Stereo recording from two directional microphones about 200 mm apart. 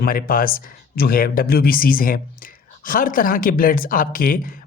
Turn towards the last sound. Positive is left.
turn(degrees=45)  # may be behind; listen again after turning